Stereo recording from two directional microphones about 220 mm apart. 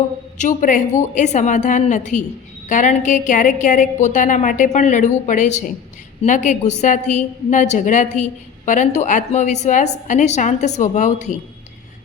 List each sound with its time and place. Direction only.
0.4 s a woman's voice: 35° left (ahead or behind)